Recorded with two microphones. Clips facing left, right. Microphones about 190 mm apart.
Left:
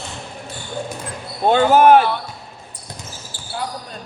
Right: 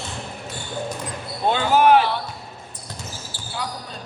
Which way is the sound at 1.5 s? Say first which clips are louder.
Left 5 dB; 50° left (ahead or behind).